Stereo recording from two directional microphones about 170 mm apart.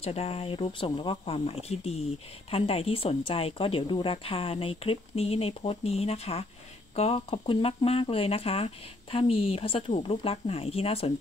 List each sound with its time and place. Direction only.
0.0 s speech: 35° left (ahead or behind)